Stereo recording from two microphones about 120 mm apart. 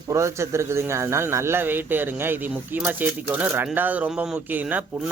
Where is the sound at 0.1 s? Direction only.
25° right (ahead or behind).